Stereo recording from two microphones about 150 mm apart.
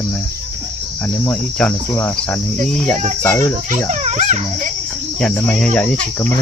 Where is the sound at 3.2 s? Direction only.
15° left (ahead or behind).